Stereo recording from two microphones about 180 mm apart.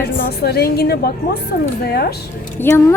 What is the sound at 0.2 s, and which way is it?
A woman's voice, 65° left (ahead or behind).